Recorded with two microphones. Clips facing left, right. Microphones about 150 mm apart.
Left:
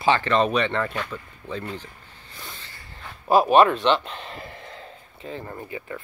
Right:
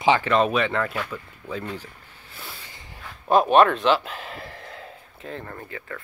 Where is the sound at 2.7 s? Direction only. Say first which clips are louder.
Right 1 dB; 20° right (ahead or behind).